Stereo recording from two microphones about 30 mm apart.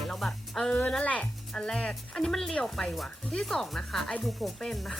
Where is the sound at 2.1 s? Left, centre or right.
Centre.